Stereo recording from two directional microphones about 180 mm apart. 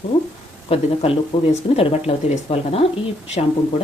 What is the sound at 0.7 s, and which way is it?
Speech, 35° left (ahead or behind).